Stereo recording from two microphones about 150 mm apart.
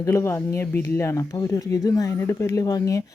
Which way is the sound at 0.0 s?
20° left (ahead or behind).